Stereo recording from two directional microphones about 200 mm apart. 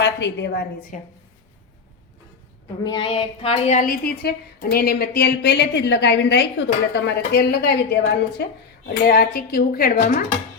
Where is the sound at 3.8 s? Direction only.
45° left (ahead or behind).